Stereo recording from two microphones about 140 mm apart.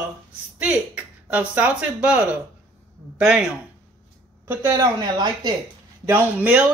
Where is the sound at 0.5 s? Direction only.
10° right (ahead or behind).